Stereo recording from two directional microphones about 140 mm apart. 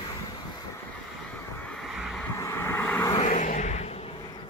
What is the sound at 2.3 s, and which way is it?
Vehicle, 20° left (ahead or behind).